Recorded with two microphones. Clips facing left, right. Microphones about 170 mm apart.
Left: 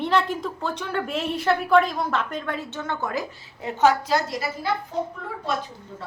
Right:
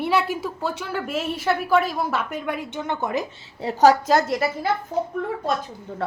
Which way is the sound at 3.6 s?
35° right (ahead or behind).